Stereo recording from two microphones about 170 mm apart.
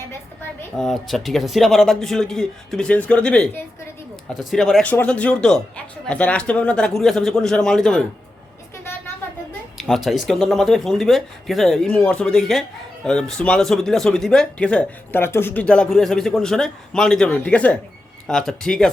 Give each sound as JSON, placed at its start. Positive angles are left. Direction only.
{"t": 0.8, "sound": "speech", "side_deg": 0}
{"t": 9.7, "sound": "speech", "side_deg": 0}